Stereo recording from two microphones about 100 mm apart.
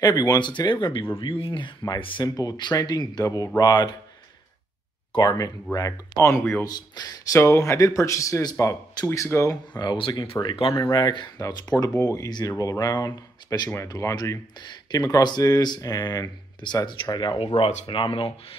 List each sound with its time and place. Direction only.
0.0 s speech: 40° left (ahead or behind)
1.1 s speech: 65° left (ahead or behind)
2.2 s speech: 40° left (ahead or behind)
5.1 s speech: 40° left (ahead or behind); by 6.6 s 25° left (ahead or behind)
6.6 s speech: 40° left (ahead or behind)
7.3 s speech: 25° left (ahead or behind)
9.8 s speech: 55° left (ahead or behind)
10.3 s speech: 25° left (ahead or behind); by 11.2 s 45° left (ahead or behind)
11.3 s speech: 35° left (ahead or behind)
14.6 s speech: 45° left (ahead or behind)
17.6 s speech: 65° left (ahead or behind)